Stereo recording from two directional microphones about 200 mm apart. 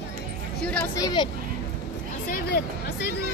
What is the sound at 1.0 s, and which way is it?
Speech, 20° left (ahead or behind).